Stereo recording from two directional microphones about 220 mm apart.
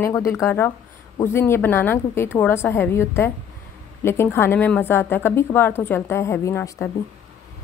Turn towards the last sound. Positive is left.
turn(degrees=15)  # may be behind; listen again after turning